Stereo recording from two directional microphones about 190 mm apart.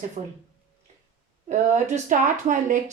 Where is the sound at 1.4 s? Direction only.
40° right (ahead or behind).